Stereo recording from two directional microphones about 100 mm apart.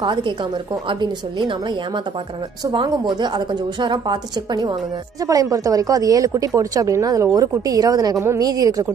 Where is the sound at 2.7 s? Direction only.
50° right (ahead or behind).